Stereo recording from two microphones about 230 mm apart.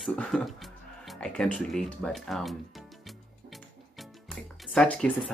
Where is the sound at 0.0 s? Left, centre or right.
Centre.